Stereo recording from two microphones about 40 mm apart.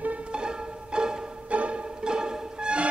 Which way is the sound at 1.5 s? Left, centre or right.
Right.